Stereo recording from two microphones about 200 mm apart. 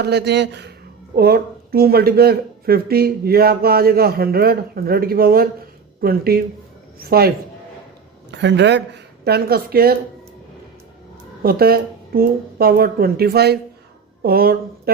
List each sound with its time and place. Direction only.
0.0 s speech: 55° right (ahead or behind)
8.3 s speech: 60° right (ahead or behind)
11.4 s speech: 50° right (ahead or behind)